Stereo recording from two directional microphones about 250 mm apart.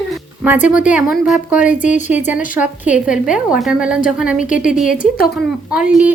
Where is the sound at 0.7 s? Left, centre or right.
Centre.